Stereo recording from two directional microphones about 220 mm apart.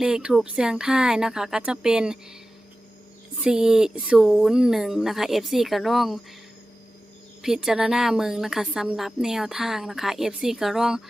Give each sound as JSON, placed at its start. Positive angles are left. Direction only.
{"t": 0.0, "sound": "a woman's voice", "side_deg": -5}
{"t": 3.4, "sound": "a woman's voice", "side_deg": -5}
{"t": 7.4, "sound": "a woman's voice", "side_deg": 0}